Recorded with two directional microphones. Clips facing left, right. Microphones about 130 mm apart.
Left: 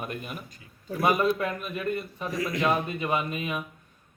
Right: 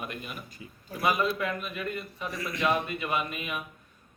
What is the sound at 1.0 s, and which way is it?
Speech, 45° left (ahead or behind).